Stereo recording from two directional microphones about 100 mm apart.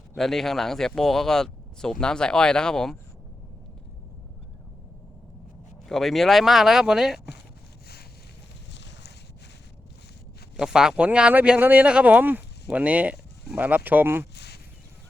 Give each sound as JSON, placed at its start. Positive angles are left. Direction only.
{"t": 0.2, "sound": "speech", "side_deg": 5}
{"t": 5.9, "sound": "speech", "side_deg": 0}
{"t": 10.6, "sound": "speech", "side_deg": -5}